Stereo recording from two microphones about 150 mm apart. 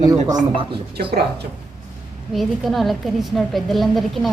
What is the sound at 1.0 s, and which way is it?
Speech, 90° right.